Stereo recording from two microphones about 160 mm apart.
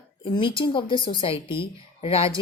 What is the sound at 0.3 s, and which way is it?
Speech, 30° left (ahead or behind).